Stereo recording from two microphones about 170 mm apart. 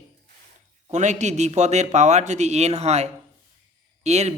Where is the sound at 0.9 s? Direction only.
45° right (ahead or behind).